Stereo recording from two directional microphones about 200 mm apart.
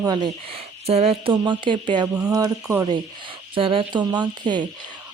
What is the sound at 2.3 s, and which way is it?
Speech, 15° right (ahead or behind).